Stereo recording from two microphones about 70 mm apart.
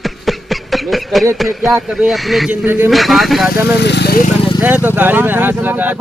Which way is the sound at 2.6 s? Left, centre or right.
Right.